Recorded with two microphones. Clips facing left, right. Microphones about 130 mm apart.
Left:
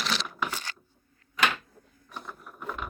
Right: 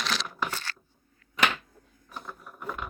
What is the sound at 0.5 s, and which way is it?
Coin, 15° left (ahead or behind).